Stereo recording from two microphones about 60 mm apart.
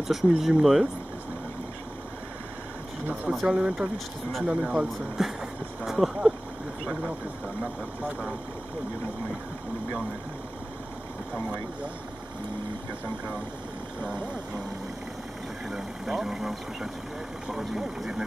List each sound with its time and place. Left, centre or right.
0.1 s speech: centre
3.3 s speech: centre
3.6 s speech: centre
5.2 s speech: centre
15.7 s speech: centre